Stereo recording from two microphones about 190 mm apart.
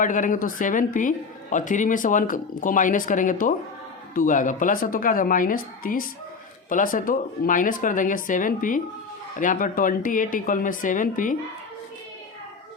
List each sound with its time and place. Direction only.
0.0 s a woman's voice: 45° left (ahead or behind)